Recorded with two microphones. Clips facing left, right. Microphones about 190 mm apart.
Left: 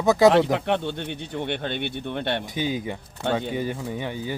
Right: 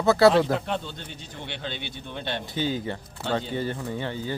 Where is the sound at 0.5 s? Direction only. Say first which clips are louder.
Left 5 dB; 65° left (ahead or behind).